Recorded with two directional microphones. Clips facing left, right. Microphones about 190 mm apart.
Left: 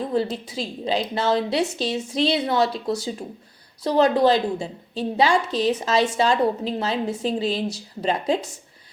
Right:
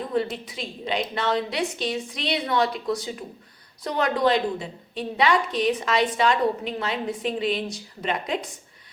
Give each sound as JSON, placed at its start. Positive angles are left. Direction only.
{"t": 0.1, "sound": "a woman's voice", "side_deg": 30}